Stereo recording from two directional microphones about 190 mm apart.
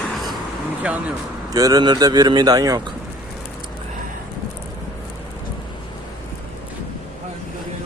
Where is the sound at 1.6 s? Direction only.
20° right (ahead or behind).